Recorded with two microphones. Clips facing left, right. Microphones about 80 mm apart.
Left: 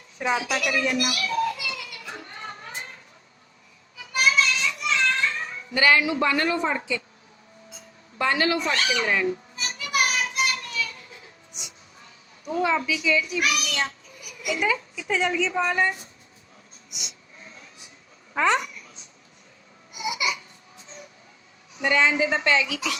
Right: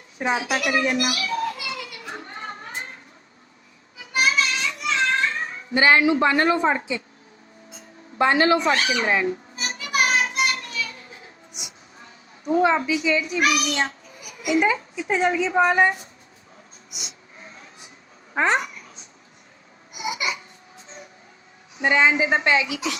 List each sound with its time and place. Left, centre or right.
0.2 s children playing: right
4.1 s child singing: right
8.2 s children playing: right
12.5 s a child's voice: right
15.7 s a woman's voice: right
16.9 s a sound: right
18.3 s a child's voice: right
20.0 s crying: right
21.8 s a woman's voice: right